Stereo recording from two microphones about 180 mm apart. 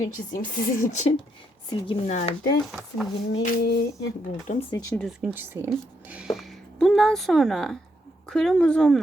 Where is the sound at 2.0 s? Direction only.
40° left (ahead or behind).